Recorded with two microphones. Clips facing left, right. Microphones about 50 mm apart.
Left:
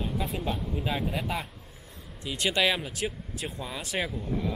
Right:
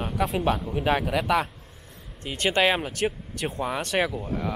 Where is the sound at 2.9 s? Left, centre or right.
Right.